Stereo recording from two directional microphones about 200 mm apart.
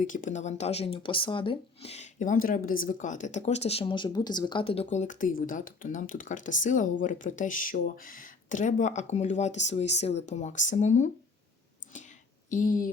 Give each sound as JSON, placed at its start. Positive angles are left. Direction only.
{"t": 0.1, "sound": "speech", "side_deg": 40}
{"t": 12.5, "sound": "speech", "side_deg": 40}